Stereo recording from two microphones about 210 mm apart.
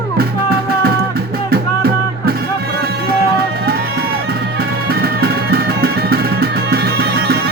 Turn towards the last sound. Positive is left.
turn(degrees=-50)  # may be behind; listen again after turning